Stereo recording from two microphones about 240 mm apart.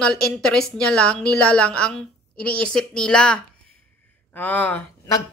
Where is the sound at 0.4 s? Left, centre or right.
Centre.